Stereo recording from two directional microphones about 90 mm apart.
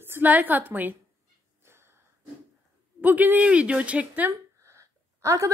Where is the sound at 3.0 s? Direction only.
20° right (ahead or behind).